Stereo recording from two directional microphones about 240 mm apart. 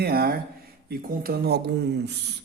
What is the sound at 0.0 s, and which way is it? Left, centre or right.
Speech, right.